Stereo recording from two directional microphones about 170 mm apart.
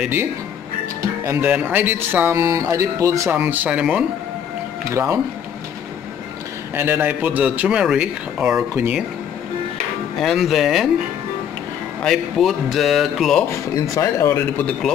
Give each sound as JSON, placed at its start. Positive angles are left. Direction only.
{"t": 0.0, "sound": "speech", "side_deg": -15}
{"t": 6.7, "sound": "speech", "side_deg": -10}
{"t": 10.1, "sound": "speech", "side_deg": 0}
{"t": 12.0, "sound": "speech", "side_deg": 0}
{"t": 13.9, "sound": "a man's voice", "side_deg": 15}